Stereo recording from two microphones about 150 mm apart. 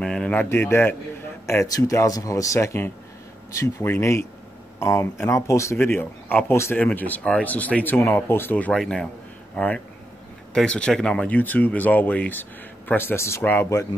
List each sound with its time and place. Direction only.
0.0 s a man's voice: 5° left (ahead or behind)